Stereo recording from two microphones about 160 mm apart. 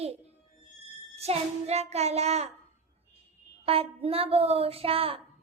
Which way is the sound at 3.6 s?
35° right (ahead or behind).